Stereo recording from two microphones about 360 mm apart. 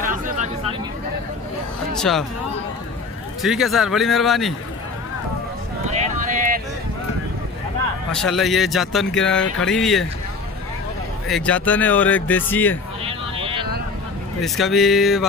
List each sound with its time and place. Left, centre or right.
0.0 s a sound: right
2.0 s speech: centre
3.4 s speech: centre
6.1 s a sound: right
8.1 s speech: centre
11.2 s speech: centre
13.0 s vehicle: centre
14.4 s speech: centre